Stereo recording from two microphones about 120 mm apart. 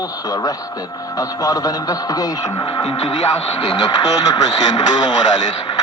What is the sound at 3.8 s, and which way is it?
Speech, 35° left (ahead or behind).